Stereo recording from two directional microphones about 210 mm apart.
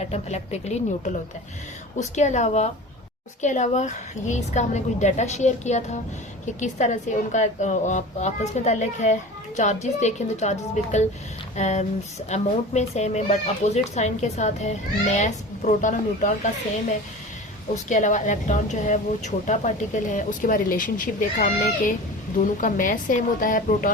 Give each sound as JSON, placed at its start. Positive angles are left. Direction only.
{"t": 0.0, "sound": "speech", "side_deg": 30}
{"t": 17.8, "sound": "speech", "side_deg": 35}